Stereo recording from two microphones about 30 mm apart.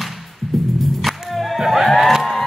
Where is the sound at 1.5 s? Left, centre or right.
Centre.